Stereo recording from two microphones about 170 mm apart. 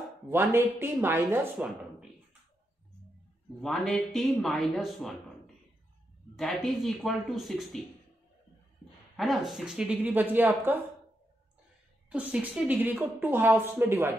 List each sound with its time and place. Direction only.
0.3 s a woman's voice: 15° right (ahead or behind)
3.6 s speech: centre (ahead or behind)
6.3 s speech: centre (ahead or behind)
9.1 s a woman's voice: centre (ahead or behind)
12.1 s a woman's voice: 10° right (ahead or behind)